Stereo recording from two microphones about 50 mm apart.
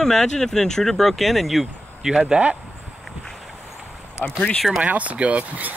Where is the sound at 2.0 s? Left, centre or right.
Centre.